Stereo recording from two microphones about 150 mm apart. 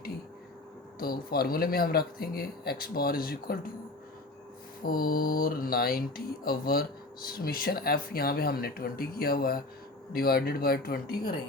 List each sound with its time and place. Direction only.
0.9 s speech: 85° left
4.8 s mantra: 75° left (ahead or behind)
6.4 s speech: 80° left